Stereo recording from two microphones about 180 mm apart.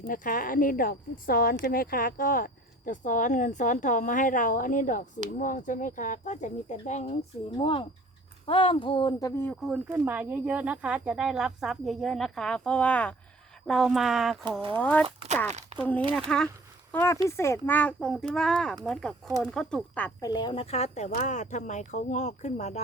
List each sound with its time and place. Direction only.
0.1 s speech: 50° left (ahead or behind)
7.5 s speech: 25° left (ahead or behind)
9.4 s speech: 5° left (ahead or behind)
14.7 s speech: 10° left (ahead or behind)
15.7 s a sound: 40° right (ahead or behind)
16.3 s speech: 5° left (ahead or behind)
20.2 s speech: 25° left (ahead or behind)